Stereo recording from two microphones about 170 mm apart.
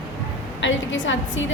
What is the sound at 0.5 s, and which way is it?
Speech, 90° left.